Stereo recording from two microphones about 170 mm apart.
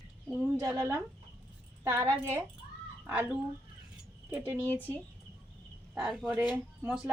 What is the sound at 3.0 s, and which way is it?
A woman's voice, 10° right (ahead or behind).